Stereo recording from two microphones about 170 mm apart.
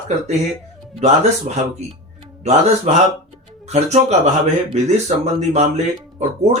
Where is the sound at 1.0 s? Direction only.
40° right (ahead or behind).